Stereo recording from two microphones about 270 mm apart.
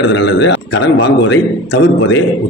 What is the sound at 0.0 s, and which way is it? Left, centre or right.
A man's voice, left.